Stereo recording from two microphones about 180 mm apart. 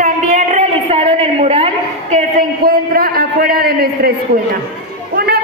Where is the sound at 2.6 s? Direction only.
55° right (ahead or behind).